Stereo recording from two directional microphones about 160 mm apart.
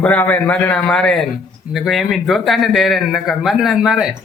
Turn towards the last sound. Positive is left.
turn(degrees=-5)  # may be behind; listen again after turning